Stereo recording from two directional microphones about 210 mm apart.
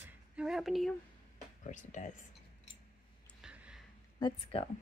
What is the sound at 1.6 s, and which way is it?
Speech, 35° left (ahead or behind).